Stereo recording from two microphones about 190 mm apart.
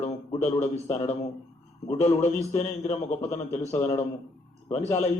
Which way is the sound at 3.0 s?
35° left (ahead or behind).